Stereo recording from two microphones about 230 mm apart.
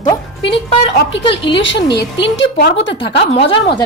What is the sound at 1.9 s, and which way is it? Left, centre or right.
Speech, left.